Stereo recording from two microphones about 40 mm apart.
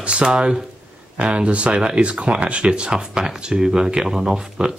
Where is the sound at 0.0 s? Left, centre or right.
Right.